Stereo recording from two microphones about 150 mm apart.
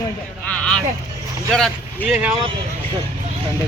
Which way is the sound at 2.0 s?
10° right (ahead or behind).